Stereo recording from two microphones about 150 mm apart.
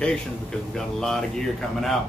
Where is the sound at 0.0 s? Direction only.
5° left (ahead or behind).